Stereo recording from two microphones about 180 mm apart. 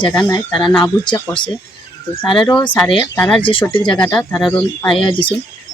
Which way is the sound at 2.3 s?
25° left (ahead or behind).